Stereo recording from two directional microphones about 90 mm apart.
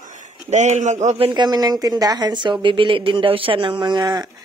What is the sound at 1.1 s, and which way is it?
Speech, 90° right.